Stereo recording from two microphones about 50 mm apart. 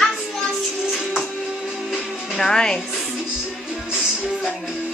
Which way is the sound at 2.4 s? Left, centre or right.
Centre.